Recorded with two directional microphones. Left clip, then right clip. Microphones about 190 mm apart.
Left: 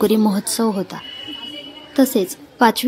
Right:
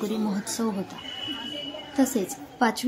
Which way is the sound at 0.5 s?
35° left (ahead or behind).